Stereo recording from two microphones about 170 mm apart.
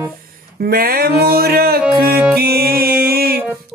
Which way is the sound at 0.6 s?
65° right (ahead or behind).